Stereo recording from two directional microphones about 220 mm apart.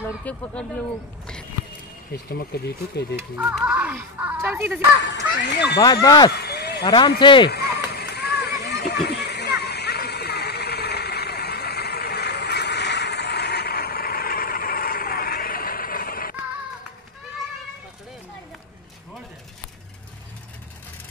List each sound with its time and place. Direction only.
0.2 s speech: 5° left (ahead or behind)
2.2 s speech: 45° left (ahead or behind)
3.2 s speech: 5° right (ahead or behind)
5.8 s speech: 20° left (ahead or behind)
6.3 s a sound: 45° left (ahead or behind)
6.8 s speech: 20° left (ahead or behind)
7.4 s a sound: 45° left (ahead or behind)